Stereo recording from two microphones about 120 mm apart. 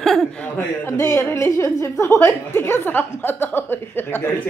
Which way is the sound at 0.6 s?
20° left (ahead or behind).